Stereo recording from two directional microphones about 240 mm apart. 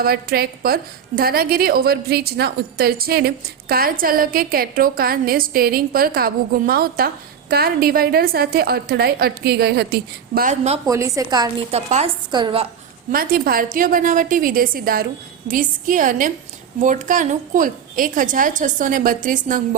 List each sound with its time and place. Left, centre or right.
0.0 s a woman's voice: right
10.8 s a woman's voice: centre
13.1 s a woman's voice: right